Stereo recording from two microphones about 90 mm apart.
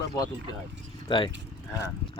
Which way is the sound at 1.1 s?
60° left (ahead or behind).